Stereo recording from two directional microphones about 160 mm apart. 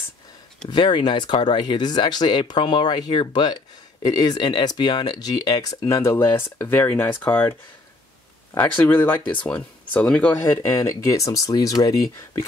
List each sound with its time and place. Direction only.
0.7 s speech: 30° left (ahead or behind); by 7.5 s 10° left (ahead or behind)
8.5 s speech: 10° left (ahead or behind)